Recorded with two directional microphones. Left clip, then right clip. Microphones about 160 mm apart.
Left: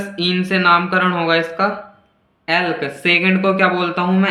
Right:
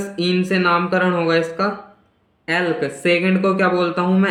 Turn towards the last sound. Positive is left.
turn(degrees=-30)  # may be behind; listen again after turning